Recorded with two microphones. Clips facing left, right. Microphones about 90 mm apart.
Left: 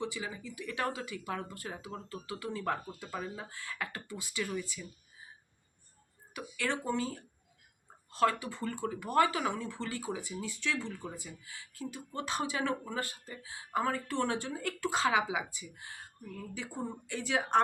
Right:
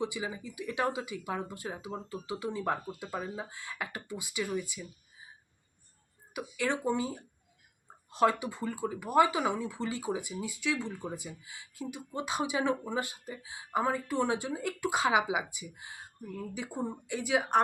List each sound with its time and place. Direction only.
0.0 s speech: 15° right (ahead or behind)
6.3 s speech: 15° right (ahead or behind)